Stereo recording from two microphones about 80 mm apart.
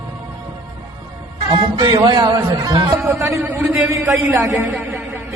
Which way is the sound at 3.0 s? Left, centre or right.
Right.